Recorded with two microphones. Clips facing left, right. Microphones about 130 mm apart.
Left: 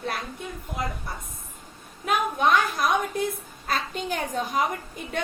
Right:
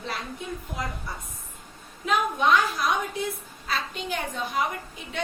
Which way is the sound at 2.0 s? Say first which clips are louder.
Even; 50° left (ahead or behind).